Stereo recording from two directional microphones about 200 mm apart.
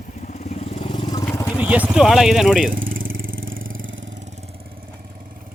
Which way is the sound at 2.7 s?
45° right (ahead or behind).